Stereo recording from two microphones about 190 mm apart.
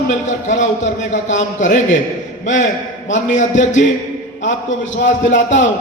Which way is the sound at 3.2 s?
40° left (ahead or behind).